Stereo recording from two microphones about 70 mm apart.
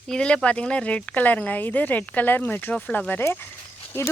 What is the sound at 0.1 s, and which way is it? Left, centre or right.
Speech, centre.